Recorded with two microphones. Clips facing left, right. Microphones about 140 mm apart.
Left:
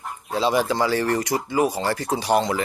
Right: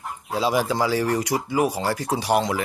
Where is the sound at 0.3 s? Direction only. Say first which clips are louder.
Left 1 dB; 10° right (ahead or behind).